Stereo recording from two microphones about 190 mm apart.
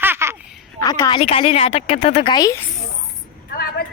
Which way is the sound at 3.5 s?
55° left (ahead or behind).